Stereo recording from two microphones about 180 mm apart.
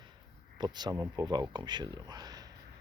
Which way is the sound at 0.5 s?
25° right (ahead or behind).